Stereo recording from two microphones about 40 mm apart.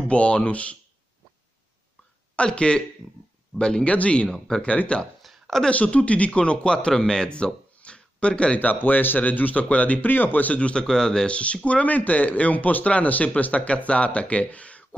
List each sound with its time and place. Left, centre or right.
0.1 s a man's voice: left
2.3 s speech: left
3.0 s speech: centre
3.5 s speech: left
3.9 s a man's voice: left
5.2 s a sound: centre
5.9 s speech: left
8.5 s speech: left
10.0 s speech: left
10.6 s speech: left
10.9 s speech: centre
11.2 s a man's voice: left